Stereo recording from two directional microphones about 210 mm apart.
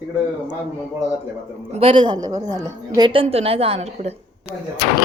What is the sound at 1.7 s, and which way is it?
A woman's voice, 25° right (ahead or behind).